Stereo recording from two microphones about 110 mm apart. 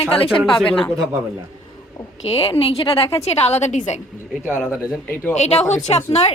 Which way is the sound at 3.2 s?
75° left (ahead or behind).